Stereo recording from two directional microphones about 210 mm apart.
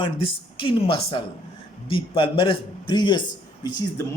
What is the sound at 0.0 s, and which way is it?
A man's voice, 25° left (ahead or behind).